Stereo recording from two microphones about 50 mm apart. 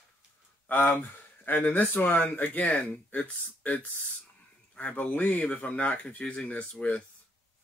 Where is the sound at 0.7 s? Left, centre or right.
Left.